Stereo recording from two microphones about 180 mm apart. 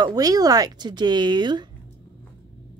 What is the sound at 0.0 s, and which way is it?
Speech, 20° right (ahead or behind).